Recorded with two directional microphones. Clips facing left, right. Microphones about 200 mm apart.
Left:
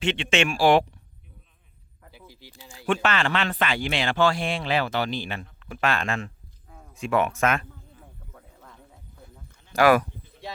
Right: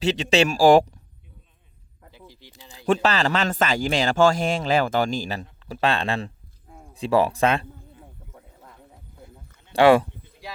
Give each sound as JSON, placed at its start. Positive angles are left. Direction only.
{"t": 0.0, "sound": "speech", "side_deg": -35}
{"t": 2.1, "sound": "single-lens reflex camera", "side_deg": 5}
{"t": 2.7, "sound": "speech", "side_deg": -35}
{"t": 9.2, "sound": "a sound", "side_deg": -25}